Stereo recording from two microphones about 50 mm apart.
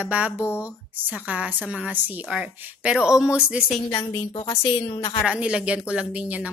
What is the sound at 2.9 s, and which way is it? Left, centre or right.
Speech, centre.